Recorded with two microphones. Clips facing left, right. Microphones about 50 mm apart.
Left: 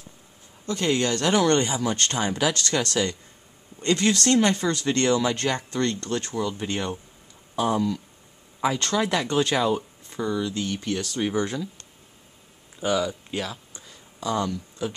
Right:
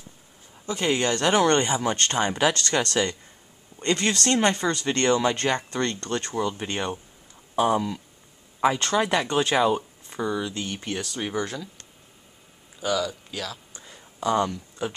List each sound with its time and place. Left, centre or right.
0.7 s speech: centre
12.8 s speech: left
13.8 s a sound: centre